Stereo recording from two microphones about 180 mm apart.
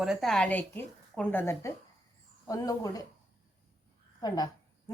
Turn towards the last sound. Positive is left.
turn(degrees=20)  # may be behind; listen again after turning